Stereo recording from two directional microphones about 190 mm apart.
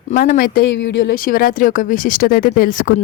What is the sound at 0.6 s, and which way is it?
Speech, 70° left (ahead or behind).